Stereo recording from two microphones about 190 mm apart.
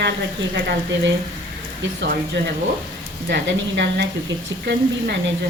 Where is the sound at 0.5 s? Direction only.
65° right (ahead or behind).